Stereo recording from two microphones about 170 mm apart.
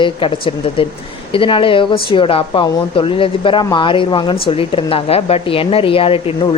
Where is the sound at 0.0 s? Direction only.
30° left (ahead or behind).